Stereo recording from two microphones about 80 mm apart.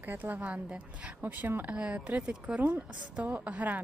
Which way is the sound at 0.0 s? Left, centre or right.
Right.